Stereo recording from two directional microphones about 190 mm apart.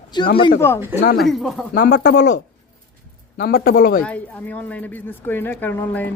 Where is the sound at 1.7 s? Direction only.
60° left (ahead or behind).